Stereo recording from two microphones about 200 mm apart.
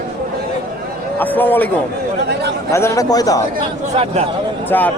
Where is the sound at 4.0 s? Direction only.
30° right (ahead or behind).